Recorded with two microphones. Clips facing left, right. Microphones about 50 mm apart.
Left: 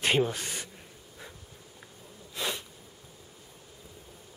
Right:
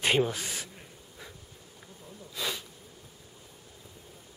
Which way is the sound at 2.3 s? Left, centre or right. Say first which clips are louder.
Left 1 dB; centre.